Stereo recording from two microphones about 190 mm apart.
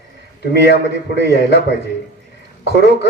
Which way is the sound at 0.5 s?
60° left (ahead or behind).